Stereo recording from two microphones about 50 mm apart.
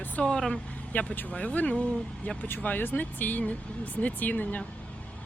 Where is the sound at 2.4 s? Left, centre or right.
Left.